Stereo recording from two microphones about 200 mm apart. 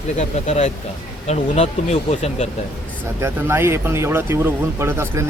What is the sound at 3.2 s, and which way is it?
Speech, 15° right (ahead or behind).